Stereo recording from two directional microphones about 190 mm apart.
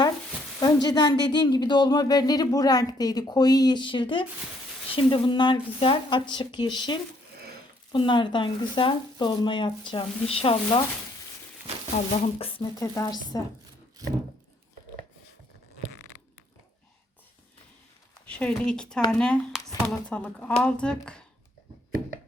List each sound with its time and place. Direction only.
0.6 s speech: 20° left (ahead or behind)
12.4 s speech: 30° left (ahead or behind)
12.8 s speech: 15° left (ahead or behind)
14.0 s a sound: 20° right (ahead or behind)
18.3 s a woman's voice: 5° left (ahead or behind)